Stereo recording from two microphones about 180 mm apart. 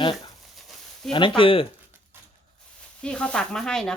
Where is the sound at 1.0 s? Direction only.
Centre (ahead or behind).